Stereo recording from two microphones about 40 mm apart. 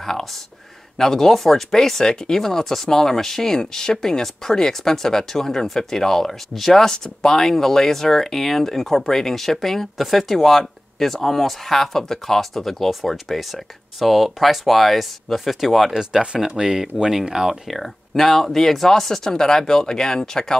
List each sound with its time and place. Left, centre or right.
0.0 s speech: centre
15.9 s speech: centre
17.6 s speech: centre